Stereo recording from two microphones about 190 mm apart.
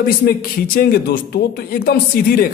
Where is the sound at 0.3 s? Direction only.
55° left (ahead or behind).